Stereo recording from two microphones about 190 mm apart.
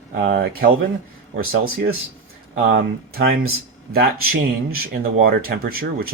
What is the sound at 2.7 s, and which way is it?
Speech, 50° right (ahead or behind).